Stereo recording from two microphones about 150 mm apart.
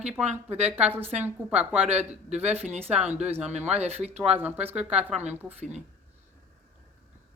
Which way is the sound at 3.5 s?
45° right (ahead or behind).